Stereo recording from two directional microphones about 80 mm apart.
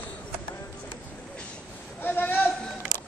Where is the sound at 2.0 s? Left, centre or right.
Left.